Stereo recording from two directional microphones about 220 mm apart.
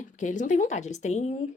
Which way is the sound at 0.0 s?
35° left (ahead or behind).